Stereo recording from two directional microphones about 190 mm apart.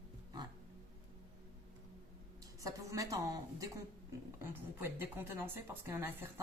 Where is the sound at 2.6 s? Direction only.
15° right (ahead or behind).